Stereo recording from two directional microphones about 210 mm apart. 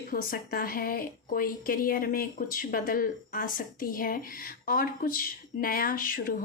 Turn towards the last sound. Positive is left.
turn(degrees=40)  # may be behind; listen again after turning